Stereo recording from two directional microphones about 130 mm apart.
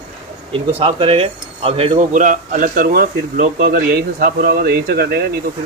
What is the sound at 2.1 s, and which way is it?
A man's voice, 85° right.